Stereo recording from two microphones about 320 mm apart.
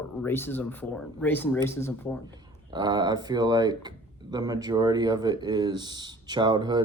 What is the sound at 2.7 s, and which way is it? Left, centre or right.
Speech, centre.